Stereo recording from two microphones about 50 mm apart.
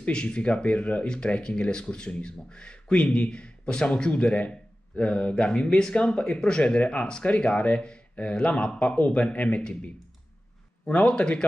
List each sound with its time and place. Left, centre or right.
0.1 s speech: centre
10.9 s speech: left